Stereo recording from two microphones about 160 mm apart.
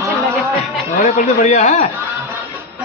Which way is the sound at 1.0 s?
45° left (ahead or behind).